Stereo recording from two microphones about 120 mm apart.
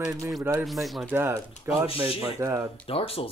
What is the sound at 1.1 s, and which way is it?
Speech, 20° right (ahead or behind).